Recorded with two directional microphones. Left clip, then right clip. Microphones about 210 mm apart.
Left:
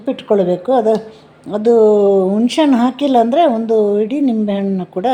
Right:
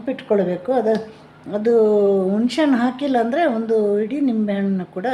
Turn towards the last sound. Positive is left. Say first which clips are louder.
# left 6 dB
turn(degrees=25)  # may be behind; listen again after turning